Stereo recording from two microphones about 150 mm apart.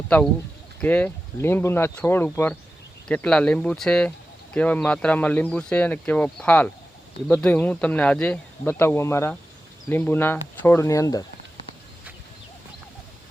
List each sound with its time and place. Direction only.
0.8 s speech: 10° left (ahead or behind)